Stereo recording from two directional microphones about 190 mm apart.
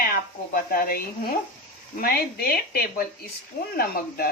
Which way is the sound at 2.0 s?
55° left (ahead or behind).